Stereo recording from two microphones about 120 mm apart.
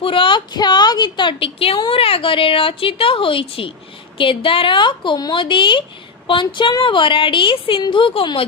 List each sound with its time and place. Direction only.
0.0 s a woman's voice: 45° left (ahead or behind)